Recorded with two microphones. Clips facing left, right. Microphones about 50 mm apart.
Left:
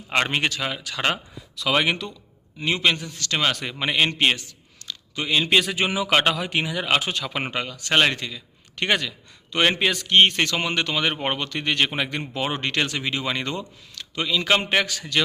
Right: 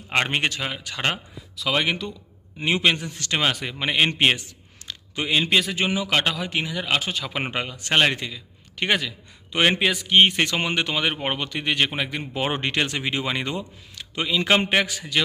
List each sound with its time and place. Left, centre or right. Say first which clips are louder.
0.1 s speech: even; centre
1.0 s speech: left 1 dB; centre
2.6 s a man's voice: right 1 dB; right
3.3 s speech: even; centre
4.0 s speech: right 1 dB; centre
4.4 s a sound: right 1 dB; right
5.2 s speech: even; centre
5.5 s speech: left 1 dB; centre
7.5 s speech: left 1 dB; centre
10.4 s speech: even; centre
12.3 s a man's voice: right 1 dB; right
15.1 s speech: left 1 dB; centre